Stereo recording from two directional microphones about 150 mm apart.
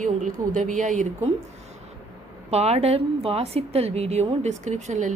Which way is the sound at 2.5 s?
45° right (ahead or behind).